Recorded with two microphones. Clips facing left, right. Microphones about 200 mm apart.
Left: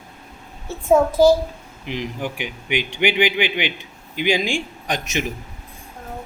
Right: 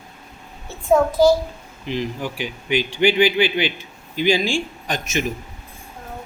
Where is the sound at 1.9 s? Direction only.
15° left (ahead or behind).